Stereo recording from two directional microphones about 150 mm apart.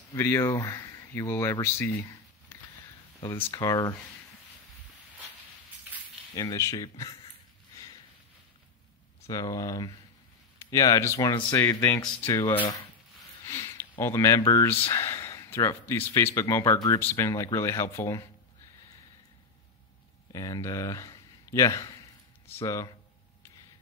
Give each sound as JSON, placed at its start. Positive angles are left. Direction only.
{"t": 0.1, "sound": "speech", "side_deg": 20}
{"t": 3.5, "sound": "speech", "side_deg": 25}
{"t": 6.3, "sound": "speech", "side_deg": 20}
{"t": 9.3, "sound": "speech", "side_deg": 25}
{"t": 20.3, "sound": "speech", "side_deg": 20}